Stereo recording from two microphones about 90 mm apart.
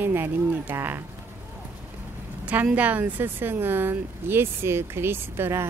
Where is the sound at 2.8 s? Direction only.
20° right (ahead or behind).